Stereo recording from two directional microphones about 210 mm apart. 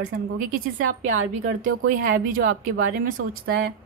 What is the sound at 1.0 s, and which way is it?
Speech, 85° right.